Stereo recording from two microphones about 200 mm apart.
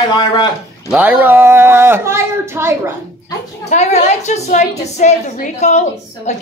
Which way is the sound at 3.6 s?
35° left (ahead or behind).